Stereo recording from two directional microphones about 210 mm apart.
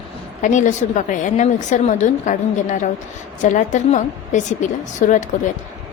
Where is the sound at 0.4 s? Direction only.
35° left (ahead or behind).